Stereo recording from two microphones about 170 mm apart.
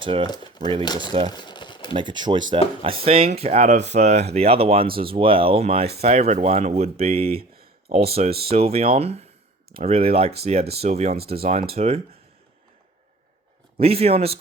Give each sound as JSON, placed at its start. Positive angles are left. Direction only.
{"t": 0.0, "sound": "speech", "side_deg": -30}
{"t": 0.3, "sound": "speech", "side_deg": 25}
{"t": 1.3, "sound": "a sound", "side_deg": 25}
{"t": 1.9, "sound": "speech", "side_deg": -30}
{"t": 13.7, "sound": "speech", "side_deg": -35}